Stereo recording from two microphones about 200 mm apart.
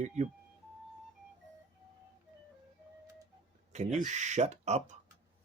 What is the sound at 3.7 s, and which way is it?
Speech, 35° right (ahead or behind).